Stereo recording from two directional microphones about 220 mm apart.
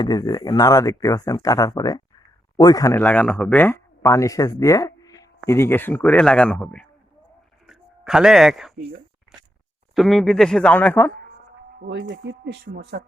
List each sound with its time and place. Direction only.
0.0 s speech: 20° left (ahead or behind)
7.7 s a sound: centre (ahead or behind)
9.9 s speech: centre (ahead or behind)
11.9 s speech: 55° right (ahead or behind)